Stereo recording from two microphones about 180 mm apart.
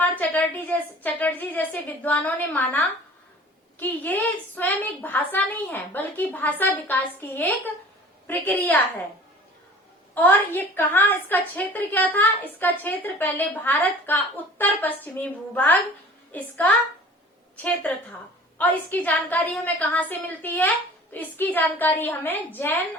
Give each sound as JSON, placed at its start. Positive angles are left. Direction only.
{"t": 0.0, "sound": "a woman's voice", "side_deg": 10}
{"t": 10.2, "sound": "a woman's voice", "side_deg": 10}